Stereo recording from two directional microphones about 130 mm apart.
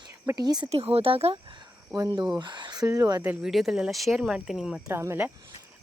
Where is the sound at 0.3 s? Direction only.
30° right (ahead or behind).